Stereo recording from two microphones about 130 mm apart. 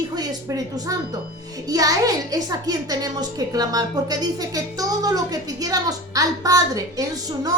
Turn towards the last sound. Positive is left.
turn(degrees=-30)  # may be behind; listen again after turning